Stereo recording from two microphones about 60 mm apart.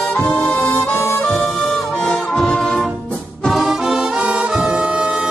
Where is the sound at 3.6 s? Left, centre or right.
Centre.